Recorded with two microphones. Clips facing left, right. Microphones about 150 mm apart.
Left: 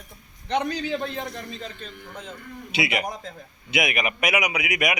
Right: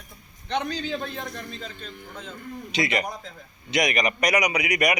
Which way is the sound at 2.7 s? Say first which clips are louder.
Even; 5° left (ahead or behind).